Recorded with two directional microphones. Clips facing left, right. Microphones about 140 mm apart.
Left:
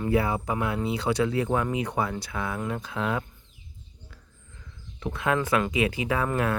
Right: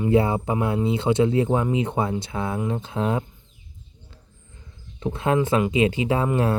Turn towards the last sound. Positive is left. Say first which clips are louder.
# right 4 dB
turn(degrees=-30)  # may be behind; listen again after turning